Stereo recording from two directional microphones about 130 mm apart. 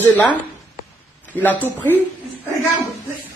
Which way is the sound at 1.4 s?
15° left (ahead or behind).